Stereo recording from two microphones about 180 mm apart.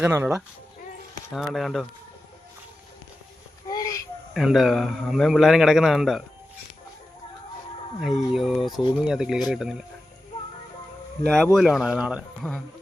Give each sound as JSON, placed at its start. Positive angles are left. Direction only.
{"t": 0.0, "sound": "speech", "side_deg": -15}
{"t": 1.3, "sound": "a man's voice", "side_deg": 0}
{"t": 3.7, "sound": "a sound", "side_deg": 20}
{"t": 4.4, "sound": "a man's voice", "side_deg": 0}
{"t": 8.0, "sound": "a man's voice", "side_deg": 0}
{"t": 11.5, "sound": "a man's voice", "side_deg": 0}